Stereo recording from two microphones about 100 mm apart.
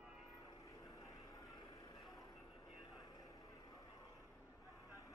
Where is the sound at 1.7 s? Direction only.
35° left (ahead or behind).